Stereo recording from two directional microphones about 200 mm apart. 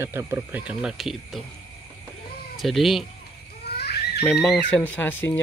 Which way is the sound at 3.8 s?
55° left (ahead or behind).